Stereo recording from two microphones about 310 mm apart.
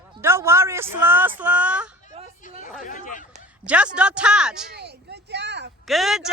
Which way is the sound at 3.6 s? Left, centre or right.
Centre.